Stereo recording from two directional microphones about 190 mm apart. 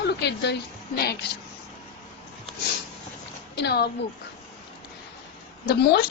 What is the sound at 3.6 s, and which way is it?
Speech, 60° left (ahead or behind).